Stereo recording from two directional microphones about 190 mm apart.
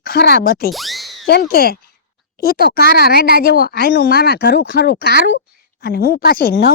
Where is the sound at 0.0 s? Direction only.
55° left (ahead or behind).